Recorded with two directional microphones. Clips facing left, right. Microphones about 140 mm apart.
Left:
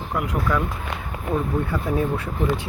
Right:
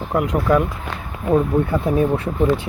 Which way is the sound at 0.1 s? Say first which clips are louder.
Right 7 dB; 25° right (ahead or behind).